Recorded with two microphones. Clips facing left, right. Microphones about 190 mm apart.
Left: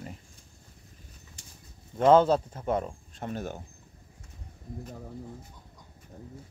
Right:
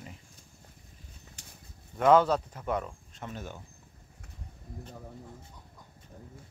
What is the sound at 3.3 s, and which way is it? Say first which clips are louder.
Speech: left 7 dB; 45° left (ahead or behind).